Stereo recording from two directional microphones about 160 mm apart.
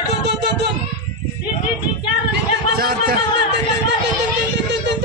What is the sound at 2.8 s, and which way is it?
Speech, 70° right (ahead or behind).